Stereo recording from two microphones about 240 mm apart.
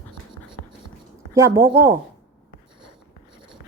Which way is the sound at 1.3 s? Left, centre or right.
Centre.